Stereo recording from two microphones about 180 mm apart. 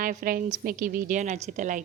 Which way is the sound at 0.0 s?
45° right (ahead or behind).